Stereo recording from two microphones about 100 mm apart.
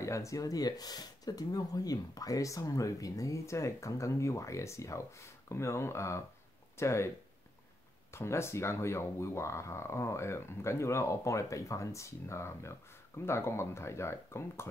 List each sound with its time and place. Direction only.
0.0 s speech: 30° left (ahead or behind)
8.1 s speech: 25° left (ahead or behind)